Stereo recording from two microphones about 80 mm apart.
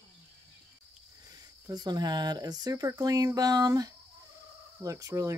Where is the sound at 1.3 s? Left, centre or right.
Right.